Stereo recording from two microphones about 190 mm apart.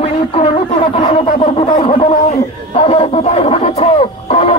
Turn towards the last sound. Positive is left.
turn(degrees=30)  # may be behind; listen again after turning